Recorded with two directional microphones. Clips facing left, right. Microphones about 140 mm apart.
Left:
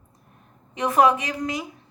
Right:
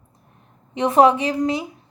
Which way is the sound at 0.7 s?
25° right (ahead or behind).